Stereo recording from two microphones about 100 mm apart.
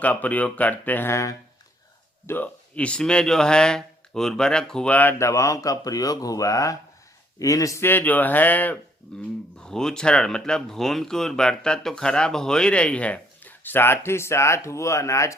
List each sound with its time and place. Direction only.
0.0 s speech: 15° left (ahead or behind)
2.2 s speech: 20° left (ahead or behind)
5.1 s speech: 30° left (ahead or behind)